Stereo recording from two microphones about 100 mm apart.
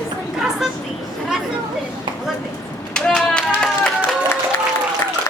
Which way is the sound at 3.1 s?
5° left (ahead or behind).